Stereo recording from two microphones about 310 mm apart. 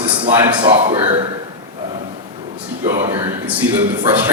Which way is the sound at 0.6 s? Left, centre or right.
Centre.